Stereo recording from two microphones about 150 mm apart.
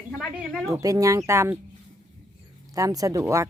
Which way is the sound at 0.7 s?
20° right (ahead or behind).